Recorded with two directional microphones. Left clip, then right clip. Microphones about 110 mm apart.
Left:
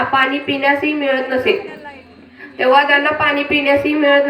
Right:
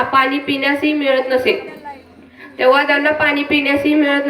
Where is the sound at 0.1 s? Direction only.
40° right (ahead or behind).